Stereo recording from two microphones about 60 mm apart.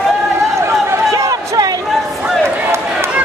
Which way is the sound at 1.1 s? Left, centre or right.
Right.